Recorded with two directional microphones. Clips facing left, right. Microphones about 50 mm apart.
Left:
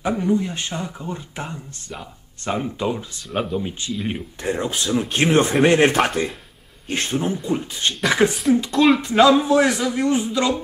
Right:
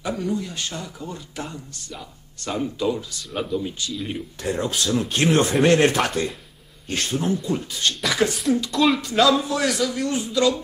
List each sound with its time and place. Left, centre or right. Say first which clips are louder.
0.0 s speech: left 5 dB; left
8.7 s speech: left 4 dB; centre
9.0 s speech: left 4 dB; left